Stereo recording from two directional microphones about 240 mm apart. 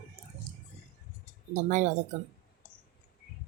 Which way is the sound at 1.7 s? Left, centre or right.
Right.